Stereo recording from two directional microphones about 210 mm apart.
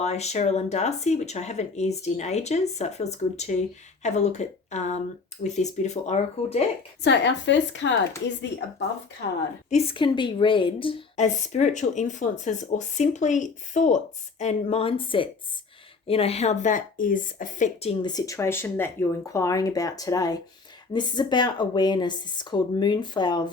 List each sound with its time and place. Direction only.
0.0 s a woman's voice: 30° left (ahead or behind)
7.0 s a woman's voice: 55° left (ahead or behind)
9.6 s a woman's voice: 30° left (ahead or behind)